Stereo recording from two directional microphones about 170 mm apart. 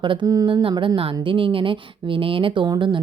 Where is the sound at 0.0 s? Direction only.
30° right (ahead or behind).